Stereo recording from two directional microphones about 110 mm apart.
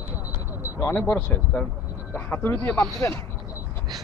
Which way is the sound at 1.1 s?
10° left (ahead or behind).